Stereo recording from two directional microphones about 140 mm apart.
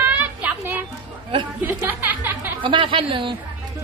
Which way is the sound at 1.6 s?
15° right (ahead or behind).